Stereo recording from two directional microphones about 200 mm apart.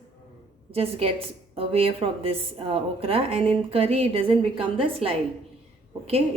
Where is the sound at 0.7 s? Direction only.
30° right (ahead or behind).